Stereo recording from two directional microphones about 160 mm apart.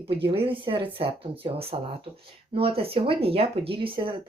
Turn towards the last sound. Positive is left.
turn(degrees=-30)  # may be behind; listen again after turning